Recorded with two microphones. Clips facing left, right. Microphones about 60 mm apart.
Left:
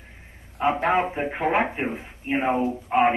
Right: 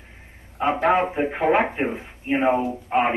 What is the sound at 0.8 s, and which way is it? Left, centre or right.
Speech, centre.